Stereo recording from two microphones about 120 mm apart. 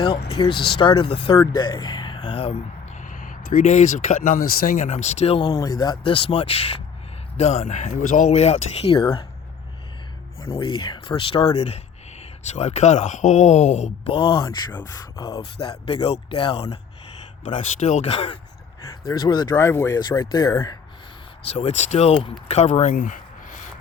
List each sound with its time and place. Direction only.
0.0 s speech: 40° left (ahead or behind); by 5.4 s 60° left (ahead or behind)
5.4 s speech: 30° left (ahead or behind)
6.1 s speech: 50° left (ahead or behind)
7.3 s speech: 65° left (ahead or behind); by 9.2 s 50° left (ahead or behind)
10.6 s speech: 40° left (ahead or behind)
12.5 s speech: 70° left (ahead or behind)
14.0 s speech: 45° left (ahead or behind)
14.9 s speech: 25° left (ahead or behind)
15.4 s speech: 45° left (ahead or behind)
17.7 s speech: 65° left (ahead or behind)
18.8 s speech: 35° left (ahead or behind)
19.5 s speech: 25° left (ahead or behind)
21.5 s speech: 65° left (ahead or behind); by 23.6 s 90° left